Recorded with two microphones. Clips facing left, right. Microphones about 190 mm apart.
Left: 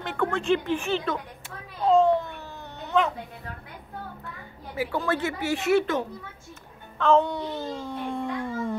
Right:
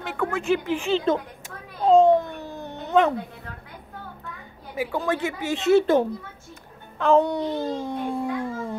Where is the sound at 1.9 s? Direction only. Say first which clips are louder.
Right 4 dB; 15° right (ahead or behind).